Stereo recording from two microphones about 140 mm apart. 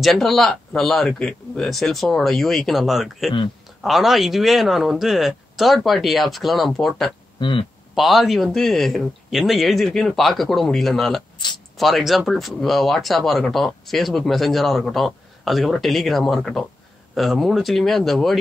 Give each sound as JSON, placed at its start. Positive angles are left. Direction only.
{"t": 0.0, "sound": "speech", "side_deg": 0}
{"t": 7.3, "sound": "speech", "side_deg": 35}
{"t": 7.9, "sound": "speech", "side_deg": 0}
{"t": 11.3, "sound": "a sound", "side_deg": 35}
{"t": 11.7, "sound": "speech", "side_deg": 0}